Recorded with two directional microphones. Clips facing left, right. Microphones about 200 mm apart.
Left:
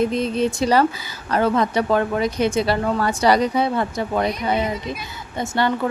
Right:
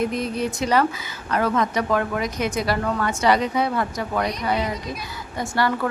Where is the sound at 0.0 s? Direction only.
25° left (ahead or behind).